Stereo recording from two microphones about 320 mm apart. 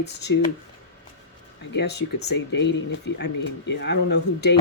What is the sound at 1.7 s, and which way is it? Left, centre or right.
Speech, left.